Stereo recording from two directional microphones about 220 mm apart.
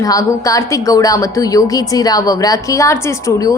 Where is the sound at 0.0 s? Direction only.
15° left (ahead or behind).